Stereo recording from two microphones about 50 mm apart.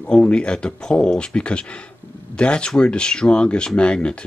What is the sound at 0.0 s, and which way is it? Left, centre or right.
Speech, left.